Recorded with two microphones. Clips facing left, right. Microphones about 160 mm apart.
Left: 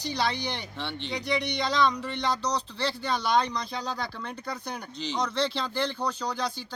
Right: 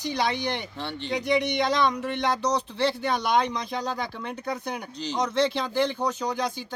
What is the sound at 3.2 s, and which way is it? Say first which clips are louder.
Speech: left 1 dB; 15° right (ahead or behind).